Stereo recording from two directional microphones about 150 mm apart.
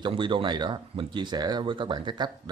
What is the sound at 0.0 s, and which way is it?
Speech, 35° right (ahead or behind).